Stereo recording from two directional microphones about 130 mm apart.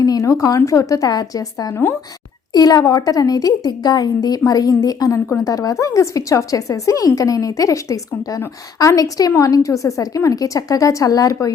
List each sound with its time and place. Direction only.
0.0 s a woman's voice: 25° left (ahead or behind)